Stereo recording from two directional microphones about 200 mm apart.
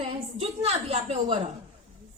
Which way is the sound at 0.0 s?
30° right (ahead or behind).